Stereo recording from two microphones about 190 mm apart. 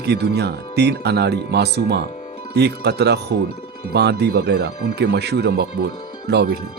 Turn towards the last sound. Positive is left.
turn(degrees=-60)  # may be behind; listen again after turning